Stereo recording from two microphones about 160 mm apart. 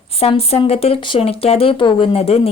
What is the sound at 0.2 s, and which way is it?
Speech, 40° left (ahead or behind).